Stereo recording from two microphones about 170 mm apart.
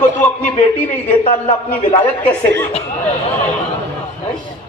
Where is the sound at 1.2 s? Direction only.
30° left (ahead or behind).